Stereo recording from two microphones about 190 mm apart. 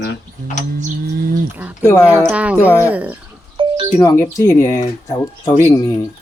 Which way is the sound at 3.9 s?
15° left (ahead or behind).